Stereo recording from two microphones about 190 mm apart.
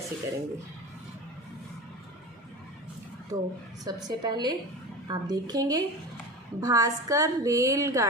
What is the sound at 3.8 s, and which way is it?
A woman's voice, 20° right (ahead or behind).